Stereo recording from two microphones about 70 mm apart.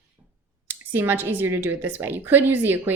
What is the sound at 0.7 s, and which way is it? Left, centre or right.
A woman's voice, right.